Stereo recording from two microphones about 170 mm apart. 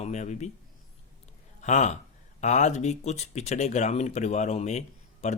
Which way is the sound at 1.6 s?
45° left (ahead or behind).